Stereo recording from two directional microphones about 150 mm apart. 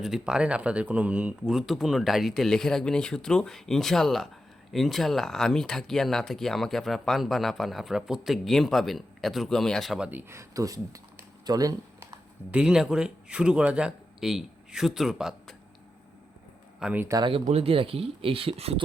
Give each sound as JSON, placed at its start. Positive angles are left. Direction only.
{"t": 0.0, "sound": "speech", "side_deg": -5}
{"t": 10.1, "sound": "speech", "side_deg": -15}
{"t": 12.5, "sound": "speech", "side_deg": -5}
{"t": 16.8, "sound": "speech", "side_deg": -10}
{"t": 17.2, "sound": "speech", "side_deg": -35}